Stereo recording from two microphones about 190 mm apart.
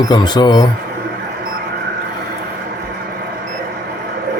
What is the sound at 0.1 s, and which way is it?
Speech, 20° left (ahead or behind).